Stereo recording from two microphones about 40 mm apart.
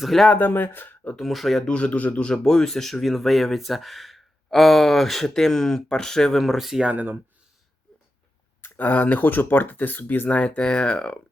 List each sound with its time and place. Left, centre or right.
0.3 s speech: left
1.1 s speech: centre
1.6 s speech: left
2.1 s speech: left
6.4 s speech: centre
6.9 s speech: right
8.8 s speech: left
10.2 s speech: left
10.6 s speech: left